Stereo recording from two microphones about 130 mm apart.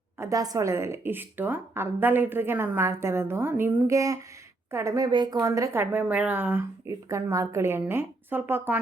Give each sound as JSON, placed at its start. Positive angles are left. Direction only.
{"t": 0.2, "sound": "speech", "side_deg": -25}